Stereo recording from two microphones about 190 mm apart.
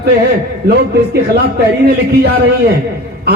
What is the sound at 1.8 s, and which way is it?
Speech, 60° right (ahead or behind).